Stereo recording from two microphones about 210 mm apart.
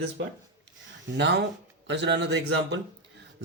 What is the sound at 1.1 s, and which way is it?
Speech, 55° right (ahead or behind).